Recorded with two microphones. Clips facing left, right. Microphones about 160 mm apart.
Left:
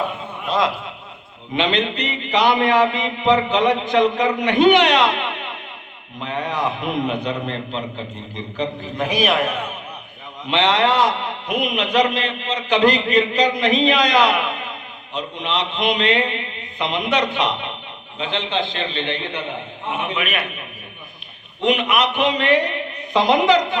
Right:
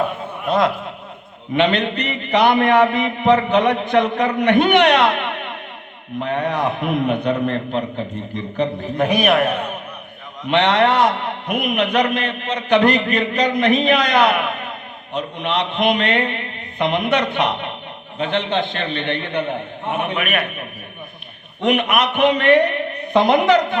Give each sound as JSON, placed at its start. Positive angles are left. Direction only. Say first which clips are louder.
{"t": 0.4, "sound": "a man's voice", "louder": "right 3 dB", "side_deg": -55}
{"t": 10.5, "sound": "a man's voice", "louder": "right 2 dB", "side_deg": -55}